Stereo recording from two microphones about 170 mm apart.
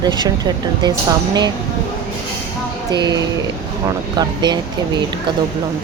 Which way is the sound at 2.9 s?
25° right (ahead or behind).